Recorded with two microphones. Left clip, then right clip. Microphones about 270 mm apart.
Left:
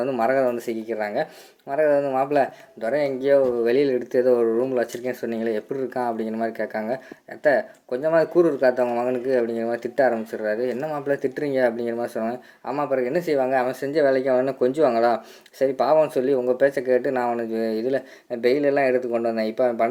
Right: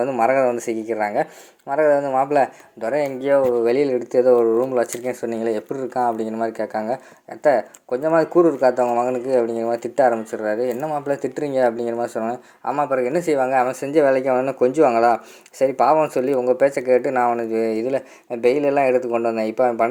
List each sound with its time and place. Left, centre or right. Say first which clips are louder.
0.0 s speech: right 3 dB; right